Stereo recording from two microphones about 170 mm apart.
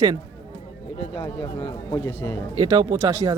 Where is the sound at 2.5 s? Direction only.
25° right (ahead or behind).